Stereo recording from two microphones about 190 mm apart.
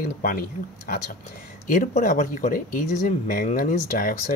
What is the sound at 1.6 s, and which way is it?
Speech, 45° left (ahead or behind).